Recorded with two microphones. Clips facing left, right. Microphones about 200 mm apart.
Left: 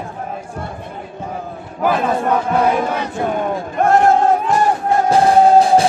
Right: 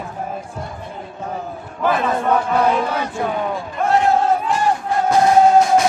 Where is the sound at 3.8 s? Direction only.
50° left (ahead or behind).